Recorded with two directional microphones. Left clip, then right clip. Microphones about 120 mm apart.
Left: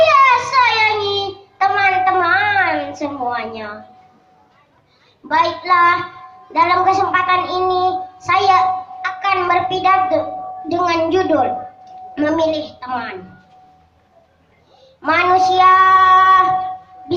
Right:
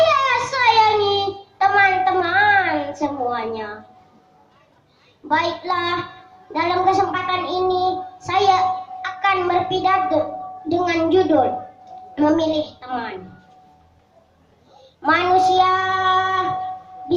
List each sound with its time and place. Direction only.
0.1 s child singing: 30° left (ahead or behind)
5.3 s a woman's voice: 30° left (ahead or behind)
10.7 s child singing: 30° left (ahead or behind)
12.1 s a woman's voice: 30° left (ahead or behind)
15.0 s child singing: 30° left (ahead or behind)